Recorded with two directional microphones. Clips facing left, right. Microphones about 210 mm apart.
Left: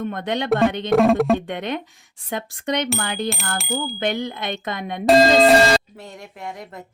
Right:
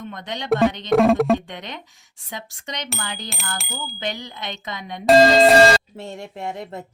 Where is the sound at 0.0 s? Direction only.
55° left (ahead or behind).